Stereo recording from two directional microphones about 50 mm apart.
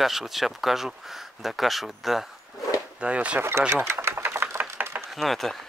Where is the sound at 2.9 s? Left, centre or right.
Right.